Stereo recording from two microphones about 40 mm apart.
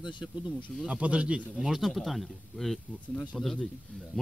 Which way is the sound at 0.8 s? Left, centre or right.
Right.